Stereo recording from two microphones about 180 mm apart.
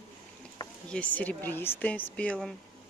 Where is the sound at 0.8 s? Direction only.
10° left (ahead or behind).